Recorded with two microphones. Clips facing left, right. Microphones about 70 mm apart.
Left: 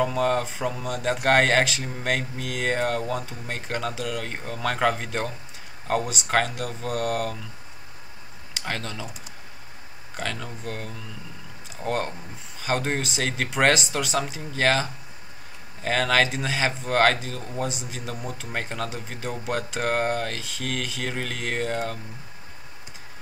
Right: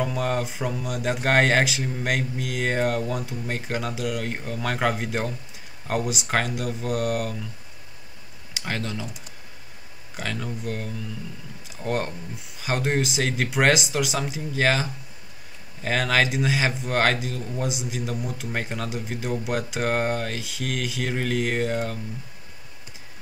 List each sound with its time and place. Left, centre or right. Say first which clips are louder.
0.0 s speech: left 2 dB; centre
8.5 s speech: right 2 dB; centre
10.1 s speech: right 1 dB; centre